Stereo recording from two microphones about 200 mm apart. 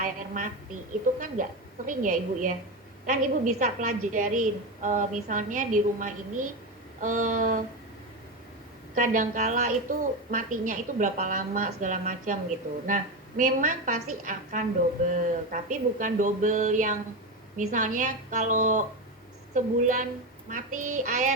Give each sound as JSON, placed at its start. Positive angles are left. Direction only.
{"t": 0.0, "sound": "a woman's voice", "side_deg": -40}
{"t": 9.0, "sound": "a woman's voice", "side_deg": -40}